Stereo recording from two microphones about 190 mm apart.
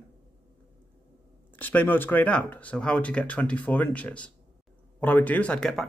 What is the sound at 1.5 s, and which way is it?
Speech, 10° left (ahead or behind).